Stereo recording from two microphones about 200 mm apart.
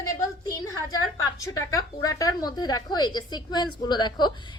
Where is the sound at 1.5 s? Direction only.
15° left (ahead or behind).